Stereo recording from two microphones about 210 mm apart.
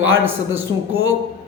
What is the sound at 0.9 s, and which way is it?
Speech, 70° right (ahead or behind).